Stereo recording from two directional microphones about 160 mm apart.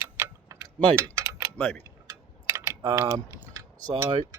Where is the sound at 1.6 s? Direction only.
10° left (ahead or behind).